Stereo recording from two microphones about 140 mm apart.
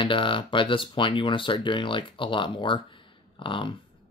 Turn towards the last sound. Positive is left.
turn(degrees=35)  # may be behind; listen again after turning